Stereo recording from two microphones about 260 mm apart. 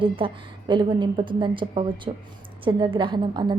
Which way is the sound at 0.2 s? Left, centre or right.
Centre.